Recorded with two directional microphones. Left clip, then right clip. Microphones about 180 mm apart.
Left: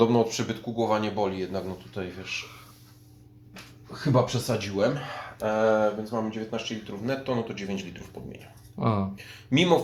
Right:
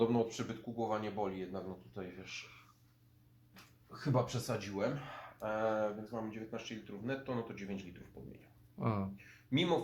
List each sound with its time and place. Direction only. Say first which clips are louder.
0.0 s speech: left 11 dB; 40° left (ahead or behind); by 2.3 s 25° left (ahead or behind)
4.1 s speech: left 11 dB; 20° left (ahead or behind)
4.6 s speech: left 14 dB; 35° left (ahead or behind)
5.4 s mantra: left 12 dB; 45° left (ahead or behind)
5.7 s speech: left 12 dB; 35° left (ahead or behind)
8.8 s speech: left 11 dB; 5° left (ahead or behind)
9.5 s speech: left 11 dB; 35° left (ahead or behind)